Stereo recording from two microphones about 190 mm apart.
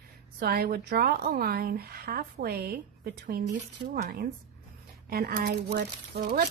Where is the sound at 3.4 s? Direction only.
40° right (ahead or behind).